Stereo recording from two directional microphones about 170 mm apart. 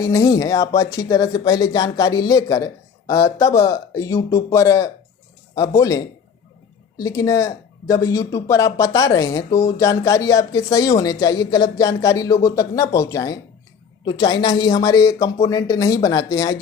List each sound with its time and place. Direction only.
0.0 s speech: 20° left (ahead or behind)